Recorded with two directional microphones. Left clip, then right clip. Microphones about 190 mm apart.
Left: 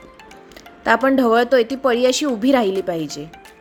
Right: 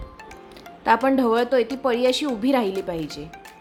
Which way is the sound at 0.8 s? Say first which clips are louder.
Left 3 dB; 15° left (ahead or behind).